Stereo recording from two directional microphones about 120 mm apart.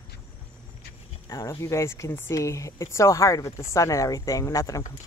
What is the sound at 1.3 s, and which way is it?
Speech, 30° left (ahead or behind).